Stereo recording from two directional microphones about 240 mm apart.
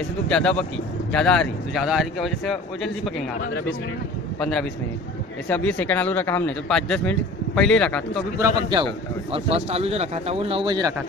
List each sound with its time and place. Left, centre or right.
0.3 s speech: centre
4.4 s speech: centre
8.4 s speech: centre